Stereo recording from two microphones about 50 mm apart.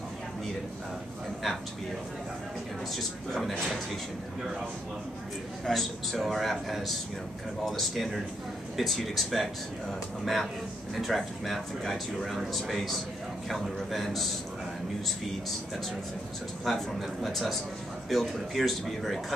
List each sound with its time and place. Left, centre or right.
3.0 s speech: centre
5.7 s speech: centre
16.6 s speech: centre